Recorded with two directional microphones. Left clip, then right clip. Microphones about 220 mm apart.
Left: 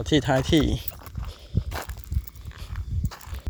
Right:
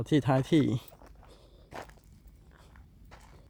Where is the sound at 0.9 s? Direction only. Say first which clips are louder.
Left 11 dB; 50° left (ahead or behind).